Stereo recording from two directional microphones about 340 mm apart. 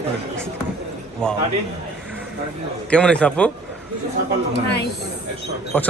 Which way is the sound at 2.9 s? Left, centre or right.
Centre.